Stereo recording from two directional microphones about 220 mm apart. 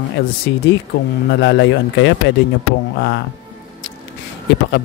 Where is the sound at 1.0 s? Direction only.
55° left (ahead or behind).